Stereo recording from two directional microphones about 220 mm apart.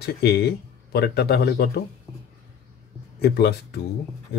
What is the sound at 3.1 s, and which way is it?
Speech, 45° left (ahead or behind).